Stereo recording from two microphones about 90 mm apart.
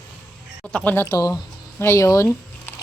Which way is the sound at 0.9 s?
35° left (ahead or behind).